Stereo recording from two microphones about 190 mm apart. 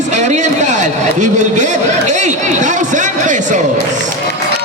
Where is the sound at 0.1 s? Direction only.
40° right (ahead or behind).